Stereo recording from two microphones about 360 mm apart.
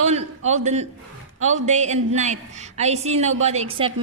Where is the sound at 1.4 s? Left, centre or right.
Centre.